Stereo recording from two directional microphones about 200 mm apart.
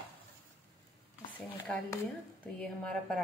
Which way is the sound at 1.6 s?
5° left (ahead or behind).